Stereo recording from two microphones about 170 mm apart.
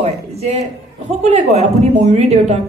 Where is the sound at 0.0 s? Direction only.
40° right (ahead or behind).